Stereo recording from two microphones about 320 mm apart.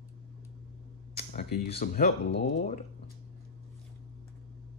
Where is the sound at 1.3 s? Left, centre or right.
Left.